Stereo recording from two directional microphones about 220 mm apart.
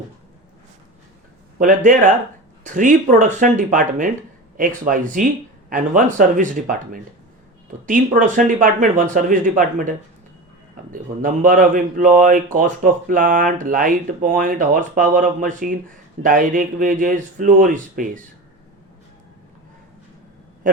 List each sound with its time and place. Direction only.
1.5 s speech: 35° right (ahead or behind)
10.9 s speech: 35° right (ahead or behind)